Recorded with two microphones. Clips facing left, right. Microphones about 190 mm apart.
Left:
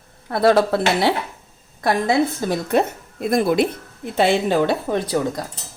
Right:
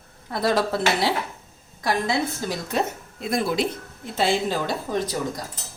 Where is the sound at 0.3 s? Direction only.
60° left (ahead or behind).